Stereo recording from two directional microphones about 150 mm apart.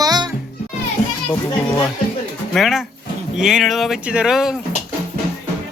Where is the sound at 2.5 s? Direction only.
Centre (ahead or behind).